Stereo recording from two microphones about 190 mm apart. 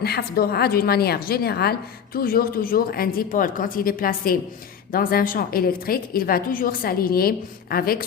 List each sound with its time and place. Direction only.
0.0 s a woman's voice: 55° left (ahead or behind)